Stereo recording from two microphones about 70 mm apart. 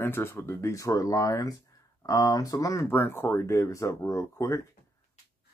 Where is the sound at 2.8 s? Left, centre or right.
Left.